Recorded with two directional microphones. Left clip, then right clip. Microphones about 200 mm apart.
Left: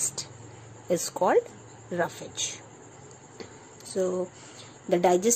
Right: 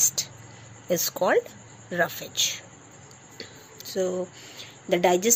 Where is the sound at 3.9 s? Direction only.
10° left (ahead or behind).